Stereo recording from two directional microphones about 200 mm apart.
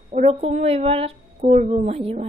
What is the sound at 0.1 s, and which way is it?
A woman's voice, 30° right (ahead or behind).